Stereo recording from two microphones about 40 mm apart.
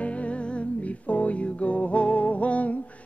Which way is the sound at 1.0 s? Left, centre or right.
Left.